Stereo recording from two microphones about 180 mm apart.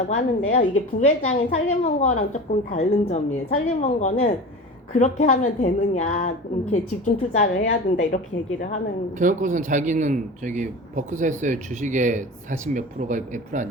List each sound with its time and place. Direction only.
0.5 s a woman's voice: 45° left (ahead or behind)
9.1 s speech: 45° right (ahead or behind)